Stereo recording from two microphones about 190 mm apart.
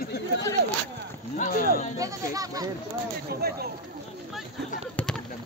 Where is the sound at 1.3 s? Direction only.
45° left (ahead or behind).